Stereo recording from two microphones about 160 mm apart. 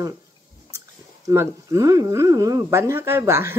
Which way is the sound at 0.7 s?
20° right (ahead or behind).